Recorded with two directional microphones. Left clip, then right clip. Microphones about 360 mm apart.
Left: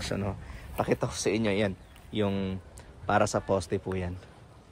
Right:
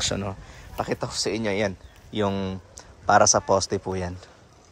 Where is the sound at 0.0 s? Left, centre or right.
Centre.